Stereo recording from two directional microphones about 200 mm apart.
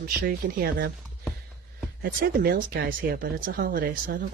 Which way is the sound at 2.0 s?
45° right (ahead or behind).